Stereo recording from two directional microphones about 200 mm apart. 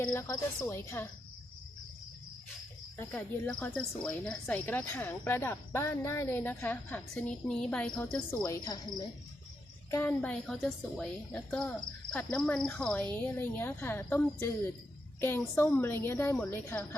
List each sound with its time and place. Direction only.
0.0 s speech: 15° left (ahead or behind)
3.0 s a woman's voice: 10° left (ahead or behind)